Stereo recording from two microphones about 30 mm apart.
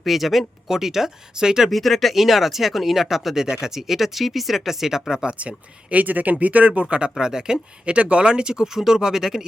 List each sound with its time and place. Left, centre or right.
0.0 s speech: centre
1.7 s speech: centre
3.4 s speech: right
3.7 s speech: centre
5.4 s speech: right
7.2 s speech: right
7.9 s speech: right
8.6 s speech: centre